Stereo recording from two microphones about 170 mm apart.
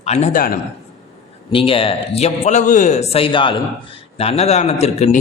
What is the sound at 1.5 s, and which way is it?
Speech, 30° left (ahead or behind).